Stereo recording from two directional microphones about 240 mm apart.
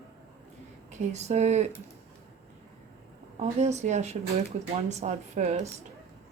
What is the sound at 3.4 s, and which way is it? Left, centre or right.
Speech, right.